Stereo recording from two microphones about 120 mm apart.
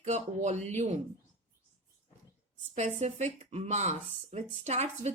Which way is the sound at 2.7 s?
70° right (ahead or behind).